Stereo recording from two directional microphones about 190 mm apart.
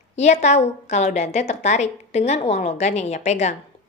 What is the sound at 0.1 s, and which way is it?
Speech, 35° left (ahead or behind).